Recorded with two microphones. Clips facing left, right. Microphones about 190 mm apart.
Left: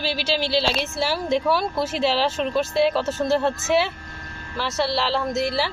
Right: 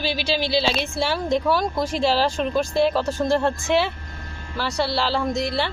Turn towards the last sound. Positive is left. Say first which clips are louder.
# even
turn(degrees=5)  # may be behind; listen again after turning